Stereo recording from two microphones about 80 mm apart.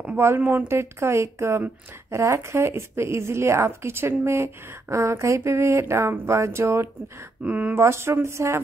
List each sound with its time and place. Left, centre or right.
0.4 s speech: right
7.4 s speech: right
7.8 s speech: right